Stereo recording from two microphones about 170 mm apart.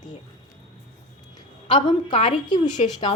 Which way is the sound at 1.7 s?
30° left (ahead or behind).